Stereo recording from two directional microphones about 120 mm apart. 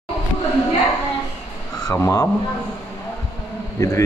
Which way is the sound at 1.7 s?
25° left (ahead or behind).